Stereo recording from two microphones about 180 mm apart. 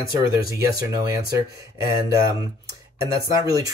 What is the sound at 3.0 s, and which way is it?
Speech, 20° right (ahead or behind).